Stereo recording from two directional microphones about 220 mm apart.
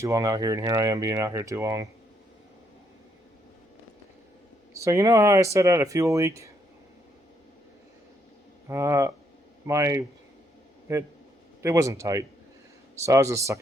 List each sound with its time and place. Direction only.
0.0 s speech: 15° right (ahead or behind)
4.7 s speech: 15° right (ahead or behind)
8.6 s speech: 15° right (ahead or behind)